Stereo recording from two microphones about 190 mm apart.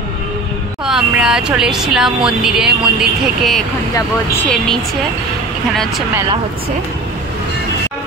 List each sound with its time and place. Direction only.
0.8 s speech: 5° right (ahead or behind)